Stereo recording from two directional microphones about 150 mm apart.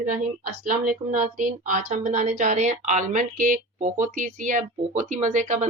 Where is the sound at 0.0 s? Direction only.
65° right (ahead or behind).